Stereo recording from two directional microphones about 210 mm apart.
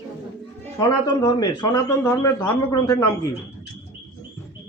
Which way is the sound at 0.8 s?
20° left (ahead or behind).